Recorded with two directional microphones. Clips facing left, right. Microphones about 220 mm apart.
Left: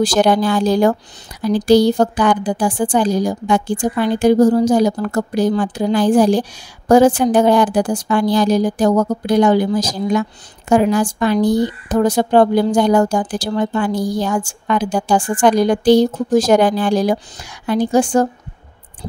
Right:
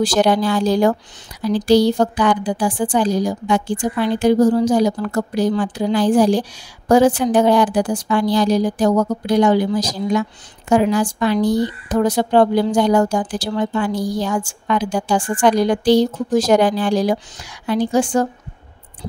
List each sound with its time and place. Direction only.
0.0 s speech: 45° left (ahead or behind)